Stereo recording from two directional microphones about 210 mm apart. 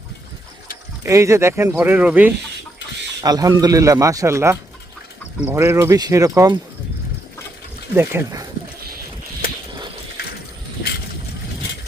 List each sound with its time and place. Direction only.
1.0 s speech: 15° right (ahead or behind)
3.2 s speech: 20° right (ahead or behind)
7.9 s speech: 15° right (ahead or behind)